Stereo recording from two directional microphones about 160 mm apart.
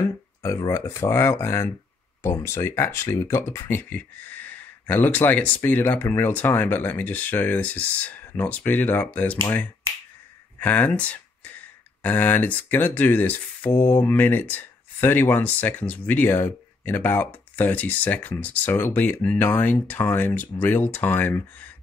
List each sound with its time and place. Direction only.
0.4 s speech: 20° left (ahead or behind)